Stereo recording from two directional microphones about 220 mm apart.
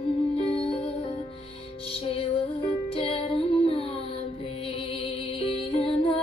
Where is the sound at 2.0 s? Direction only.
25° left (ahead or behind).